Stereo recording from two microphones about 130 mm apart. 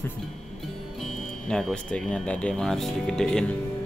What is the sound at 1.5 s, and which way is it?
Speech, 5° left (ahead or behind).